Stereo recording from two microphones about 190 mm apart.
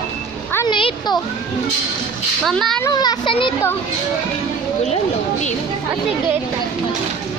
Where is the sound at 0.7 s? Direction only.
25° left (ahead or behind).